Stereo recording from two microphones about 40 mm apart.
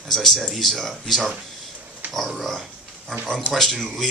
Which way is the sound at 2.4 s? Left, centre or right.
Centre.